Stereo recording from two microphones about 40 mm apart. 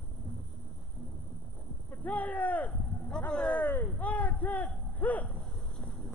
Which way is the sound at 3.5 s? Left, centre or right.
Left.